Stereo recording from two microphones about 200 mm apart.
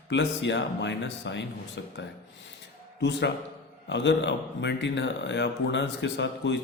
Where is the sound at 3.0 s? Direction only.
60° left (ahead or behind).